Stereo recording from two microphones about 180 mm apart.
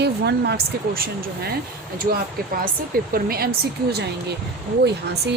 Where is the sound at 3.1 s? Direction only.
55° right (ahead or behind).